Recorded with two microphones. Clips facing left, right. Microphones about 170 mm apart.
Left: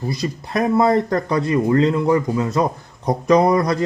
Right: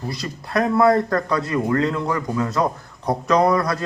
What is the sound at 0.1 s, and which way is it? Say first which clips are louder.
A man's voice: left 1 dB; 20° left (ahead or behind).